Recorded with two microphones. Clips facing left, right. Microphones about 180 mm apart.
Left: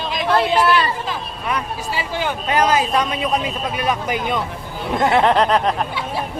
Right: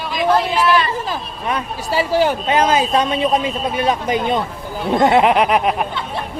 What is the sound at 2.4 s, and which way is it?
A man's voice, 25° right (ahead or behind).